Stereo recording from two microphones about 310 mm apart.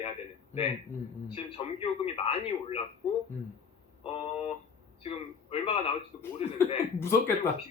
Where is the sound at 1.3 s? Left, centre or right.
Centre.